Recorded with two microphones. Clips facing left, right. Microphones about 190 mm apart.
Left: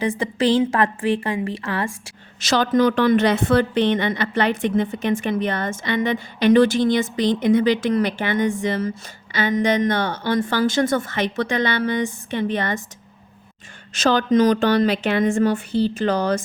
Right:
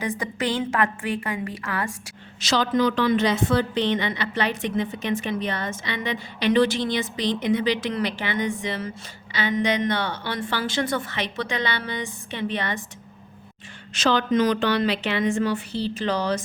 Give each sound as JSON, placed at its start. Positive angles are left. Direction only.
{"t": 0.0, "sound": "a woman's voice", "side_deg": 25}
{"t": 2.4, "sound": "a woman's voice", "side_deg": 50}
{"t": 13.9, "sound": "a woman's voice", "side_deg": 45}